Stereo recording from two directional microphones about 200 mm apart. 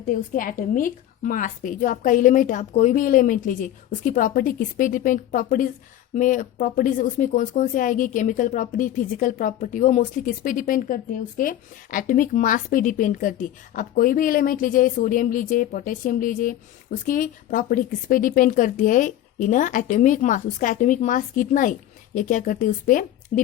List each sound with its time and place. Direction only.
0.1 s a woman's voice: 45° left (ahead or behind)